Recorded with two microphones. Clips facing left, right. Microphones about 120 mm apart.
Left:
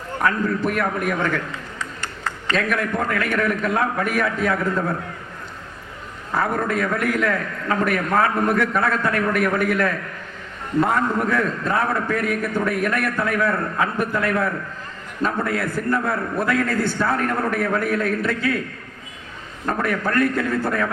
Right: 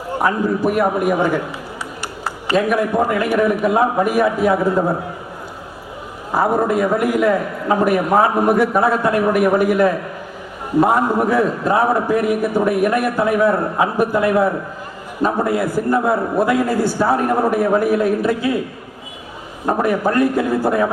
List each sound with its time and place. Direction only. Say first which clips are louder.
0.1 s a man's voice: right 4 dB; 15° right (ahead or behind)
6.3 s a man's voice: right 6 dB; 30° right (ahead or behind)
14.2 s a man's voice: right 7 dB; 15° right (ahead or behind)
15.8 s a man's voice: right 6 dB; 20° right (ahead or behind)
16.5 s a man's voice: right 4 dB; 10° right (ahead or behind)
17.8 s a man's voice: right 6 dB; 15° right (ahead or behind)